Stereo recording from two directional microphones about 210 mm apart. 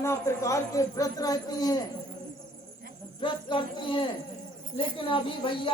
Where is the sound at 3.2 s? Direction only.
25° left (ahead or behind).